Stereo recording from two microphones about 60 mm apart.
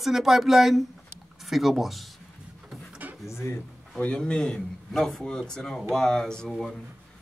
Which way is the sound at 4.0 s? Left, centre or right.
Centre.